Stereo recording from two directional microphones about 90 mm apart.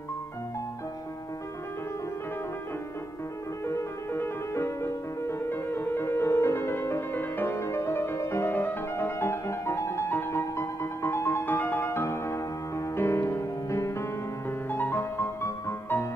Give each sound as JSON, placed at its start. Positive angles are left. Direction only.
{"t": 3.6, "sound": "music", "side_deg": 30}